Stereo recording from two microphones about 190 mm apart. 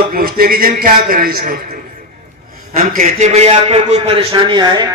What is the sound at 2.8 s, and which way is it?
A man's voice, 45° right (ahead or behind).